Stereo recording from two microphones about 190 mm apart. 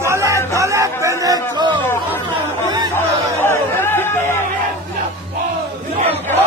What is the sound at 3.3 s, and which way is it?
Chatter, 15° left (ahead or behind).